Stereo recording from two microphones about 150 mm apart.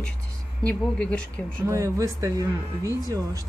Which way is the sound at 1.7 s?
20° right (ahead or behind).